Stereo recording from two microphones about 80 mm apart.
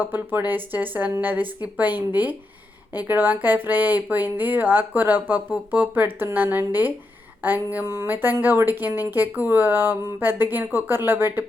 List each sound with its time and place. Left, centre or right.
0.0 s speech: right